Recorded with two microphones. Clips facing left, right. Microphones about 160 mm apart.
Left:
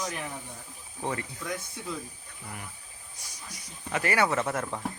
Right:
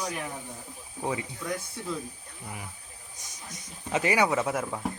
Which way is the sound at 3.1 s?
20° right (ahead or behind).